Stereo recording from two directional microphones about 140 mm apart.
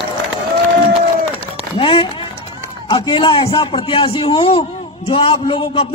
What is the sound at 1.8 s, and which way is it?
Run, 40° left (ahead or behind).